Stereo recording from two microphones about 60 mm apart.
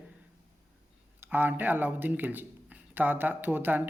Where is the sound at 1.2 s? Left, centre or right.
Right.